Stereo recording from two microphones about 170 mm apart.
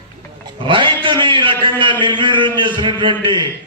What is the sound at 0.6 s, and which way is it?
A man's voice, 30° right (ahead or behind).